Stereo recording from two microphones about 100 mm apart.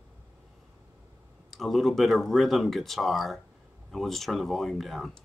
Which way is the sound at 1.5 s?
Centre (ahead or behind).